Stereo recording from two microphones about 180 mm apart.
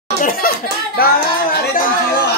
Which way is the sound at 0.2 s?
55° left (ahead or behind).